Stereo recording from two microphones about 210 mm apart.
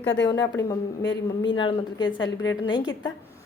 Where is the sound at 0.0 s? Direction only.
60° left (ahead or behind).